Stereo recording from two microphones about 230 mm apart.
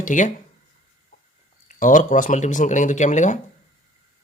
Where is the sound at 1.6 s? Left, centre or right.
Left.